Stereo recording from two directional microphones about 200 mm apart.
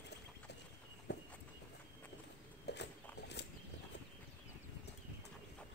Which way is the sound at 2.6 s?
60° left (ahead or behind).